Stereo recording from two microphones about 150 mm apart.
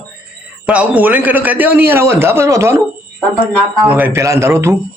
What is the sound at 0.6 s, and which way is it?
A man's voice, 10° right (ahead or behind).